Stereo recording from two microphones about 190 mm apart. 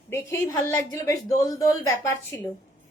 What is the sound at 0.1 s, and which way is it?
A woman's voice, 15° left (ahead or behind).